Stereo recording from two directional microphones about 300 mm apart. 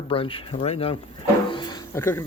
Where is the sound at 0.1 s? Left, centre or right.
Centre.